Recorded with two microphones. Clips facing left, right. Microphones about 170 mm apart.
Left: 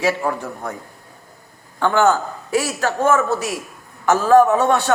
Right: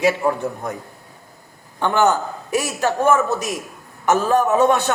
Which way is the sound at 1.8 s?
20° right (ahead or behind).